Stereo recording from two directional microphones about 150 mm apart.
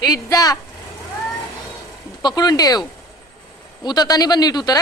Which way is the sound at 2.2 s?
25° left (ahead or behind).